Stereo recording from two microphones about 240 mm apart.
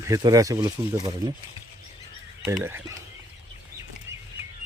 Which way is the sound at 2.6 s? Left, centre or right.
Centre.